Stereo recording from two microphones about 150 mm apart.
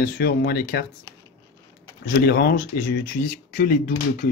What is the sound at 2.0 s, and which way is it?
Speech, 90° left.